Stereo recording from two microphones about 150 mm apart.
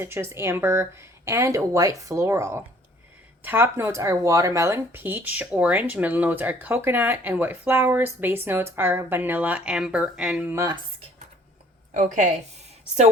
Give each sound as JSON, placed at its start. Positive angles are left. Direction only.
{"t": 0.0, "sound": "speech", "side_deg": -15}
{"t": 10.5, "sound": "speech", "side_deg": -20}
{"t": 11.9, "sound": "a woman's voice", "side_deg": -55}